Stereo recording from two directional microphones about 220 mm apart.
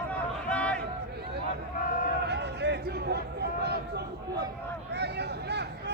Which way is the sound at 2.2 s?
50° right (ahead or behind).